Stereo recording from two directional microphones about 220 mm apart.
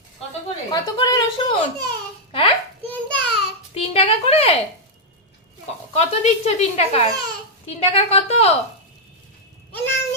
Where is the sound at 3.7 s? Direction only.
25° left (ahead or behind).